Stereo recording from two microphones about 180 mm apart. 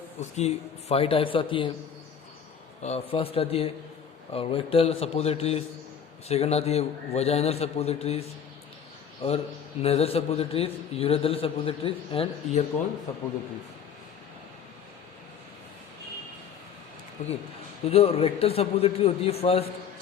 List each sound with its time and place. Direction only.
0.2 s a man's voice: 40° left (ahead or behind)
2.8 s a man's voice: 35° left (ahead or behind)
9.8 s a man's voice: 35° left (ahead or behind)
17.2 s a man's voice: 40° left (ahead or behind)